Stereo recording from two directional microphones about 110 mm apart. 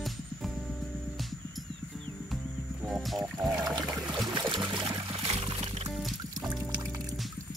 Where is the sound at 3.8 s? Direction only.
40° right (ahead or behind).